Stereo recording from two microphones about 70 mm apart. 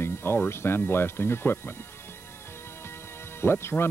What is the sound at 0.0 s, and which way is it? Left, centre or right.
Speech, left.